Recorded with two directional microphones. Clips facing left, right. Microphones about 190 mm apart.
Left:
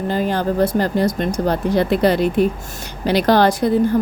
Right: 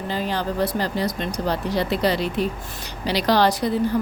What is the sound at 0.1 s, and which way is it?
Speech, 50° left (ahead or behind).